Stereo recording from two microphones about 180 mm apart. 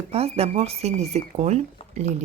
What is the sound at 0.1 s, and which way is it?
Speech, 35° right (ahead or behind).